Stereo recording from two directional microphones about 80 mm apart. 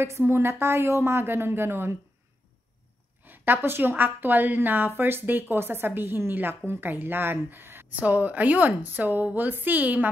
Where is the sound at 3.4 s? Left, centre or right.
Right.